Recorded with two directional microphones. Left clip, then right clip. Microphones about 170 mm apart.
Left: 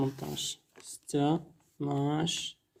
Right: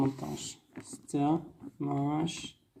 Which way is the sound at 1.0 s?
90° left.